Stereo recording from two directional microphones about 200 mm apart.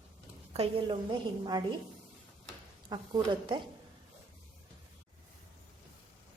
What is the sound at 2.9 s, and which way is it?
Speech, 20° right (ahead or behind).